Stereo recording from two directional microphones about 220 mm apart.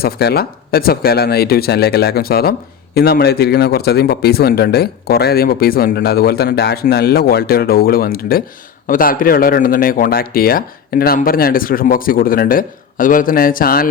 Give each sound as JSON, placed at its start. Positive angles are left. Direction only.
{"t": 0.0, "sound": "a man's voice", "side_deg": 45}